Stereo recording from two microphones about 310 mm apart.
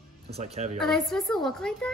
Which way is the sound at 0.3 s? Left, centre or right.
Right.